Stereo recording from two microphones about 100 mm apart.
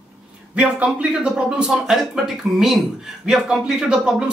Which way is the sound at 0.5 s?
10° right (ahead or behind).